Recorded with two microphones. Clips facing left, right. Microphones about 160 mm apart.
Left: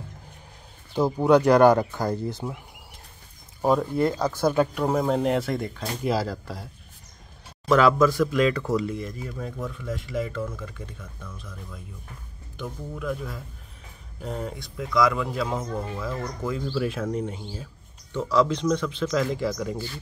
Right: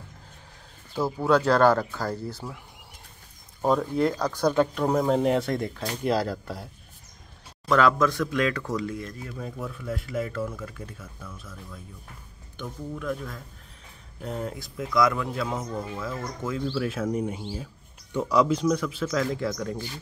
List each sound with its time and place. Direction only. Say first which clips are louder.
0.9 s speech: left 4 dB; 20° left (ahead or behind)
3.6 s speech: left 1 dB; 5° left (ahead or behind)